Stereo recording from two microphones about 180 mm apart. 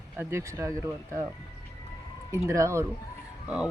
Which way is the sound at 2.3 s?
15° right (ahead or behind).